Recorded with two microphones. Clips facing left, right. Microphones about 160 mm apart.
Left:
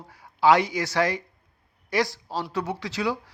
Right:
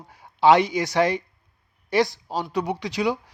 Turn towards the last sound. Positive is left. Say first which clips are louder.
# right 3 dB
turn(degrees=-15)  # may be behind; listen again after turning